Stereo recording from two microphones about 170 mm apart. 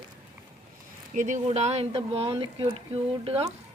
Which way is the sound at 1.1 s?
45° right (ahead or behind).